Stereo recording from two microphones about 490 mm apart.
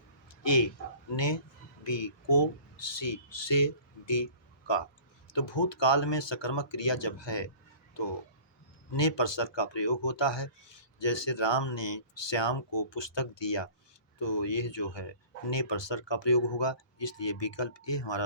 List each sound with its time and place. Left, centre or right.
0.4 s speech: left